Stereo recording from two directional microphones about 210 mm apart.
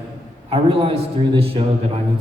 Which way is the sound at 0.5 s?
25° right (ahead or behind).